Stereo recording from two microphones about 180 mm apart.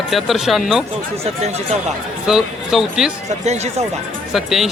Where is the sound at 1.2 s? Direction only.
35° right (ahead or behind).